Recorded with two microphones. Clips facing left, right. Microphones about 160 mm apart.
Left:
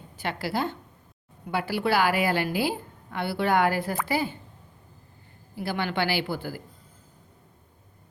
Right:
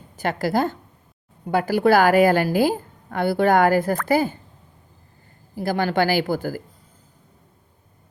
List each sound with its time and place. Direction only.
0.2 s a woman's voice: 45° right (ahead or behind)
5.5 s a woman's voice: 40° right (ahead or behind)